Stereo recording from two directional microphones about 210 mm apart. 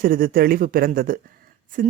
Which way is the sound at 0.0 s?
45° right (ahead or behind).